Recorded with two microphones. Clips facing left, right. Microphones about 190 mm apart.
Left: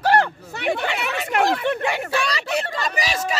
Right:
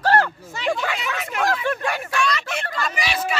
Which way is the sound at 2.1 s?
35° left (ahead or behind).